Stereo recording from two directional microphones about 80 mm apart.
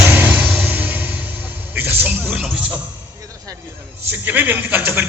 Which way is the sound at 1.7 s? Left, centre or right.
Right.